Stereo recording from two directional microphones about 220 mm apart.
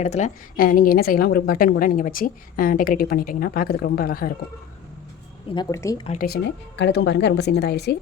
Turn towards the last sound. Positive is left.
turn(degrees=50)  # may be behind; listen again after turning